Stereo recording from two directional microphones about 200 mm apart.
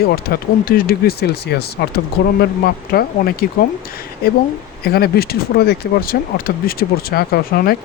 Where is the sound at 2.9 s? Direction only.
50° left (ahead or behind).